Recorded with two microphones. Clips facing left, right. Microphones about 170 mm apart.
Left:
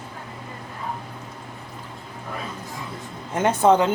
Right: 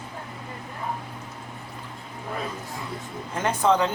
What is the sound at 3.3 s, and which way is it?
Speech, 25° left (ahead or behind).